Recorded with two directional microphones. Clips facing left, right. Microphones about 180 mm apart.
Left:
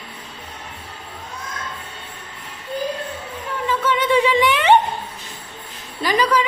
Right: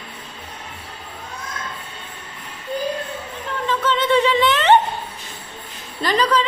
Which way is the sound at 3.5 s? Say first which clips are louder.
Even; 10° left (ahead or behind).